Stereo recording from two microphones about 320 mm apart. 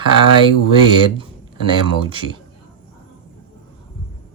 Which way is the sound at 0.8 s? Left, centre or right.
Centre.